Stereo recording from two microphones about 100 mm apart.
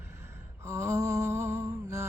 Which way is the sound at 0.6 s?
30° right (ahead or behind).